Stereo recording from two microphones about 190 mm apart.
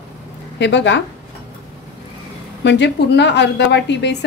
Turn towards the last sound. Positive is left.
turn(degrees=65)  # may be behind; listen again after turning